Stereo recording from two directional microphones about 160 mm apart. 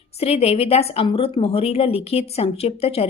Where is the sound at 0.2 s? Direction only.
40° left (ahead or behind).